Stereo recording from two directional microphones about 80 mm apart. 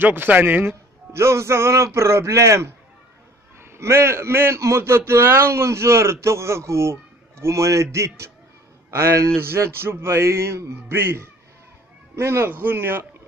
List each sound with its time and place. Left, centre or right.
0.0 s a man's voice: right
3.7 s a man's voice: right